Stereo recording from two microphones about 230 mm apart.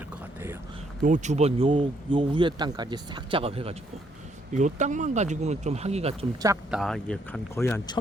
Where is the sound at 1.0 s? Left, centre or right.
Right.